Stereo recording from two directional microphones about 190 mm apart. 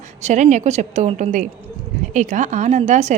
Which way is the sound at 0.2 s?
35° right (ahead or behind).